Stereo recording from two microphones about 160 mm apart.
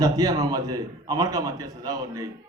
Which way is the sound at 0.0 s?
25° right (ahead or behind).